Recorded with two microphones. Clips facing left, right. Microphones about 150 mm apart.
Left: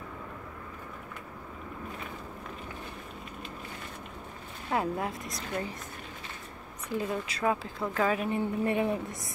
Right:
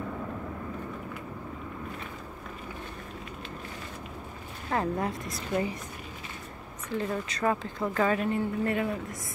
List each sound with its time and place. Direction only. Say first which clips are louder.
4.6 s speech: right 1 dB; 5° left (ahead or behind)
6.9 s speech: right 1 dB; 5° left (ahead or behind)
8.3 s speech: right 1 dB; 20° left (ahead or behind)